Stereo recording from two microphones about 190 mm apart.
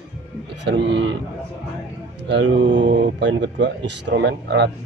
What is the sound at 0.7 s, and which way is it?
Speech, 65° right (ahead or behind).